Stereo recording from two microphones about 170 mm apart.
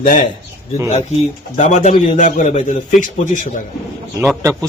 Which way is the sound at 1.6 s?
45° left (ahead or behind).